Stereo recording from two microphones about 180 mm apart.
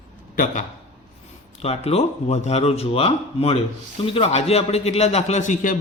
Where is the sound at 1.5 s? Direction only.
35° left (ahead or behind).